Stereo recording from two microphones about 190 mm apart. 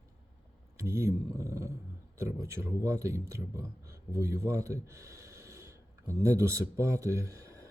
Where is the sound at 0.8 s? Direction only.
15° right (ahead or behind).